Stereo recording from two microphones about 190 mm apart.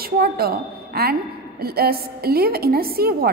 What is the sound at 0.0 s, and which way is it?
A woman's voice, 55° right (ahead or behind).